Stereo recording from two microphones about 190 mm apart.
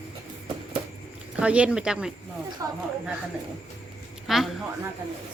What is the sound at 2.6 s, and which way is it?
Speech, 15° right (ahead or behind).